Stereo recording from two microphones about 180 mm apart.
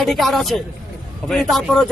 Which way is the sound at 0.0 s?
Centre (ahead or behind).